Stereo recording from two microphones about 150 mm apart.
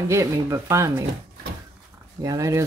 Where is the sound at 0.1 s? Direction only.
20° right (ahead or behind).